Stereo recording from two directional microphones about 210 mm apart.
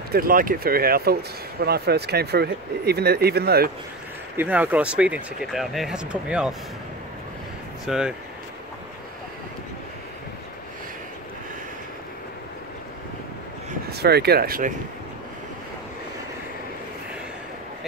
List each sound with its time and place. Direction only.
0.1 s speech: 45° right (ahead or behind)
4.4 s speech: 10° right (ahead or behind)
7.8 s speech: 5° right (ahead or behind)
13.8 s speech: 50° right (ahead or behind)